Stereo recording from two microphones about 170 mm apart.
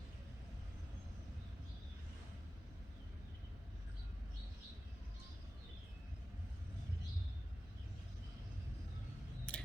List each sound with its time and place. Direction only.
9.5 s scissors: 5° left (ahead or behind)